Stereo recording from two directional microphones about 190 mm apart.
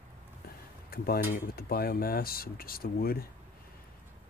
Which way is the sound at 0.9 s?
50° left (ahead or behind).